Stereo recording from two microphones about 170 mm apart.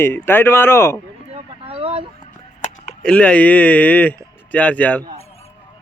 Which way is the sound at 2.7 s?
40° left (ahead or behind).